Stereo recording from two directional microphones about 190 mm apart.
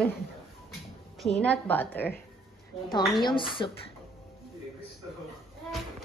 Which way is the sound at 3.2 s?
25° left (ahead or behind).